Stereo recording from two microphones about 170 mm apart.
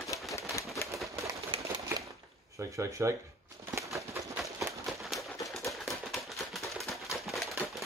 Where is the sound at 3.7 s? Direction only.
15° right (ahead or behind).